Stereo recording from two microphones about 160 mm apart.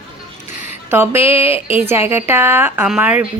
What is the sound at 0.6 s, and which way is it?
Speech, 15° right (ahead or behind).